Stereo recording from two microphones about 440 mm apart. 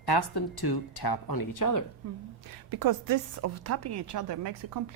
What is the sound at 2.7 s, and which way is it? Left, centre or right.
A woman's voice, right.